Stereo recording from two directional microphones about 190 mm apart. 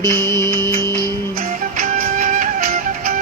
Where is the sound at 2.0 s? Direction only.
40° right (ahead or behind).